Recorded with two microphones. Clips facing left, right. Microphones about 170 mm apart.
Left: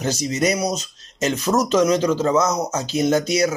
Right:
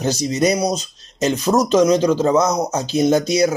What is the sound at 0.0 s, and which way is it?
Speech, 35° right (ahead or behind).